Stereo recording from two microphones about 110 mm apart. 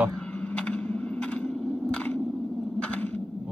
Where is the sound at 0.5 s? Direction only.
10° left (ahead or behind).